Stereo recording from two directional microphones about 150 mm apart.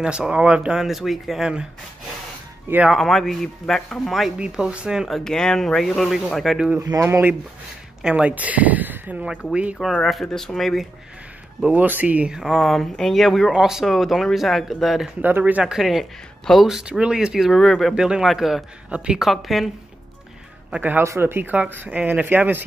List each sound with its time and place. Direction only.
0.0 s speech: 5° right (ahead or behind)
2.7 s speech: 5° right (ahead or behind)
6.8 s speech: 20° right (ahead or behind); by 10.9 s centre (ahead or behind)
11.6 s speech: 10° right (ahead or behind)
15.2 s speech: 10° right (ahead or behind)
20.7 s speech: 10° right (ahead or behind)